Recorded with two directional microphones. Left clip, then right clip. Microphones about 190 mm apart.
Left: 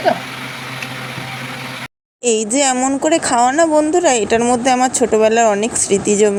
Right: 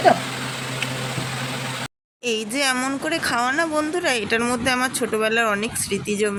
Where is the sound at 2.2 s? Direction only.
30° left (ahead or behind).